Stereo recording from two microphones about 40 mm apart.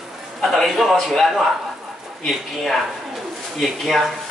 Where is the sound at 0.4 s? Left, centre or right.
Centre.